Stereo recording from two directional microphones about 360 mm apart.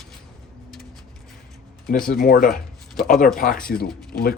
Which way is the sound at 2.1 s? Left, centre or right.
Left.